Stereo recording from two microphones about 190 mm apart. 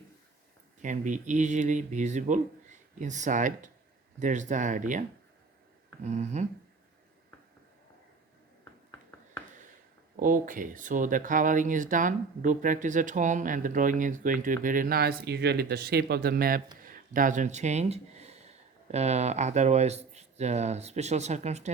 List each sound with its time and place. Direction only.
0.8 s speech: 40° right (ahead or behind)
10.2 s speech: 45° right (ahead or behind)
16.8 s a sound: 45° right (ahead or behind)
18.9 s speech: 35° right (ahead or behind)